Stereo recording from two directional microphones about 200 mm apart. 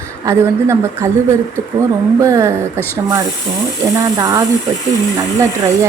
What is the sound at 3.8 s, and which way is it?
A woman's voice, 20° right (ahead or behind).